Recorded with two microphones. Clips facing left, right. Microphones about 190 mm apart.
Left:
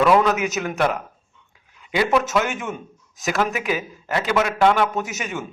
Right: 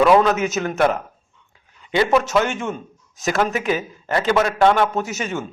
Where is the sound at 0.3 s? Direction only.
40° right (ahead or behind).